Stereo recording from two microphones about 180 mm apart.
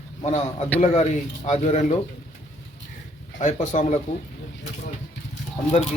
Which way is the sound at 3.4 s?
40° left (ahead or behind).